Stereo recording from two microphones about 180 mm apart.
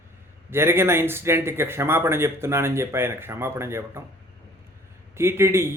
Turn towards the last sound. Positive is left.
turn(degrees=-15)  # may be behind; listen again after turning